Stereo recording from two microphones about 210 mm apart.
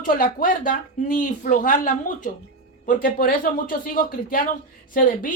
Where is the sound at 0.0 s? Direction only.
40° left (ahead or behind).